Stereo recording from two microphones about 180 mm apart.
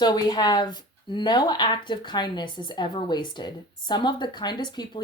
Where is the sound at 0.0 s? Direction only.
25° left (ahead or behind).